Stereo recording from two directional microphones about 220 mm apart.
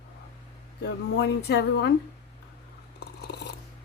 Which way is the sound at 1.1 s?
50° left (ahead or behind).